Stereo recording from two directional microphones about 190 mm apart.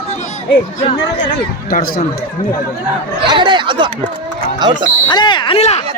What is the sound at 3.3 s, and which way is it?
Speech, 25° right (ahead or behind).